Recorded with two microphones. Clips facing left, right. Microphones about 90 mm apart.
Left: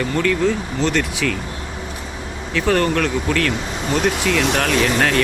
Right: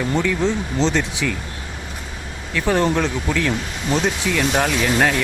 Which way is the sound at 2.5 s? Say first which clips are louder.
Left 1 dB; 10° right (ahead or behind).